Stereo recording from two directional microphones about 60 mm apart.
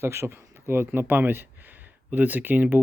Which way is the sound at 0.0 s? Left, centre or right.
Right.